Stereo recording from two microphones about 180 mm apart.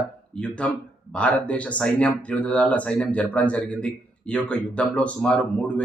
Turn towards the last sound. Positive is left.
turn(degrees=5)  # may be behind; listen again after turning